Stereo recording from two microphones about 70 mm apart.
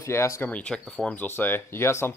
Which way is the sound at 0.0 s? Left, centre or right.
Left.